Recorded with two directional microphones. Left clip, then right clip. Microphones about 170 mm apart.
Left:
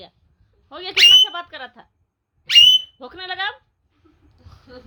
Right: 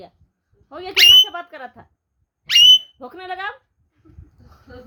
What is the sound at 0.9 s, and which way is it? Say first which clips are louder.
Speech: right 1 dB; 15° right (ahead or behind).